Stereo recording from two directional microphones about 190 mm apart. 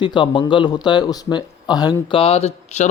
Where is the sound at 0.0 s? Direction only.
25° left (ahead or behind).